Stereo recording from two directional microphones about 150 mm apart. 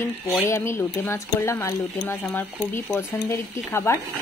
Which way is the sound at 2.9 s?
20° left (ahead or behind).